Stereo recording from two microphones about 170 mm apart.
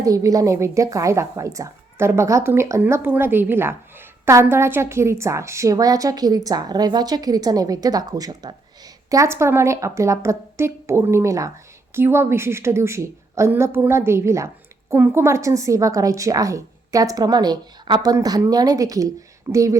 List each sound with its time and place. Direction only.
0.0 s a woman's voice: 20° right (ahead or behind)